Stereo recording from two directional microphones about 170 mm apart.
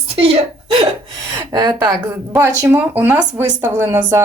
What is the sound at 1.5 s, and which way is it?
Speech, 20° right (ahead or behind).